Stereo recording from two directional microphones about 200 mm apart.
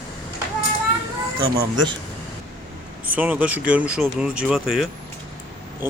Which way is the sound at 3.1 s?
10° right (ahead or behind).